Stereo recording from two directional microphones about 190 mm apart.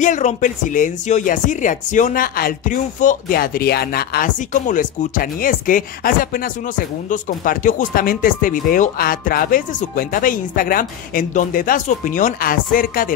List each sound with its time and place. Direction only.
0.0 s speech: 40° left (ahead or behind)